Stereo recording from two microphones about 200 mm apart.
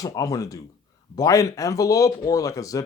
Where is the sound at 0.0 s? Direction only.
15° left (ahead or behind).